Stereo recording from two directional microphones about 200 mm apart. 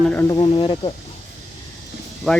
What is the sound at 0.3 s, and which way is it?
Speech, 25° left (ahead or behind).